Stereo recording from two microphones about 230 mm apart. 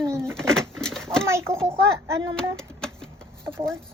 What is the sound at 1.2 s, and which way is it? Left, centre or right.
Speech, centre.